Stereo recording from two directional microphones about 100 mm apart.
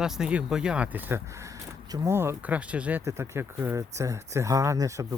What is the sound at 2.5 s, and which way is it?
Speech, 15° right (ahead or behind).